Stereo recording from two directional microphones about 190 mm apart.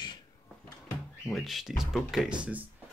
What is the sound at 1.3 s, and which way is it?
Speech, centre (ahead or behind).